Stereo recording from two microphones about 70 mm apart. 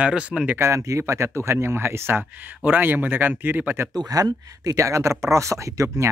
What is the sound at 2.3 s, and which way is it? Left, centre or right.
Speech, right.